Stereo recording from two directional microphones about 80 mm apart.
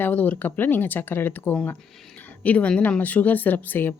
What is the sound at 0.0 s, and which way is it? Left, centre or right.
A woman's voice, left.